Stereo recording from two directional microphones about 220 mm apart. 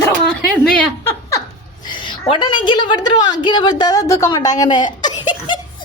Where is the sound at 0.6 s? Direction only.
10° left (ahead or behind).